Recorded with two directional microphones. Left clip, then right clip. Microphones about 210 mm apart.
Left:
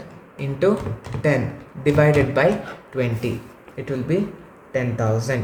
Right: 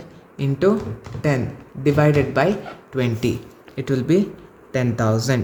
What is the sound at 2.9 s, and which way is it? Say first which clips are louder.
Speech: right 2 dB; 45° right (ahead or behind).